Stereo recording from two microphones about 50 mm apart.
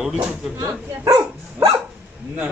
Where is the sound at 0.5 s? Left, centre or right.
Right.